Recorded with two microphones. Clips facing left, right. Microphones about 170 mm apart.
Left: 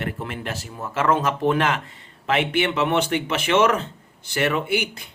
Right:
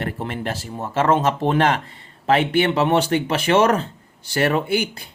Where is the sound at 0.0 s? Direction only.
35° right (ahead or behind).